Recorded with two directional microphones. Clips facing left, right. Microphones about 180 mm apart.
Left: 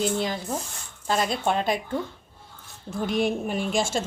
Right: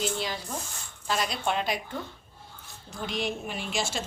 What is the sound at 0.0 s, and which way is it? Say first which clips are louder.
A woman's voice: left 5 dB; 50° left (ahead or behind).